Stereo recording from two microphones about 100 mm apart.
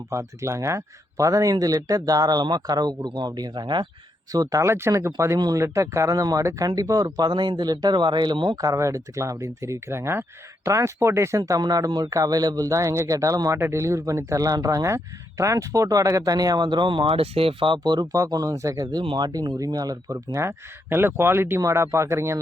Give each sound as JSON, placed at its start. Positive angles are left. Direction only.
{"t": 0.1, "sound": "speech", "side_deg": -30}
{"t": 4.3, "sound": "speech", "side_deg": -35}
{"t": 8.5, "sound": "speech", "side_deg": -35}